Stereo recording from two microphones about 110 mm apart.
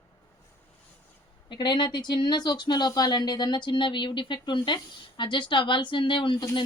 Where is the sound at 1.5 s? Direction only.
45° left (ahead or behind).